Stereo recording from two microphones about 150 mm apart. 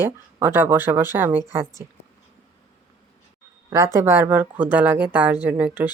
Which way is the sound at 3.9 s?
15° right (ahead or behind).